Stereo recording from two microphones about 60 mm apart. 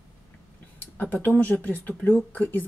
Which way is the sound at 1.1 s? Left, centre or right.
Left.